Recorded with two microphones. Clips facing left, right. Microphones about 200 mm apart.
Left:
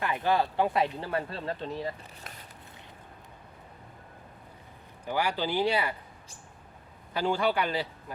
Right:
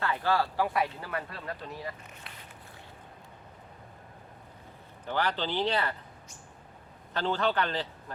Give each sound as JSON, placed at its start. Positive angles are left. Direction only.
{"t": 0.0, "sound": "speech", "side_deg": 15}
{"t": 5.0, "sound": "speech", "side_deg": 10}
{"t": 7.1, "sound": "speech", "side_deg": 10}